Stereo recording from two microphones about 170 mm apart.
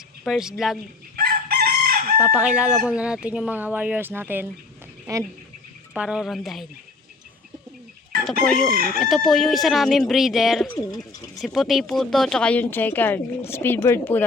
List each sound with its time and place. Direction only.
0.3 s speech: 5° right (ahead or behind)
1.1 s chicken: 60° right (ahead or behind)
2.3 s speech: 5° right (ahead or behind)
5.9 s speech: 5° right (ahead or behind)
8.2 s chicken: 5° left (ahead or behind)
9.0 s speech: centre (ahead or behind)